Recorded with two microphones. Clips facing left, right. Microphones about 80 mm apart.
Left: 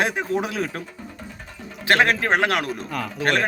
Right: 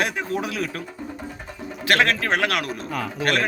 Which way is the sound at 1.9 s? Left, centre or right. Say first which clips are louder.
Left 2 dB; left.